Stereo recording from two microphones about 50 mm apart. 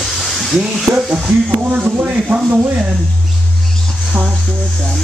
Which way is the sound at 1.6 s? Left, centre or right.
Right.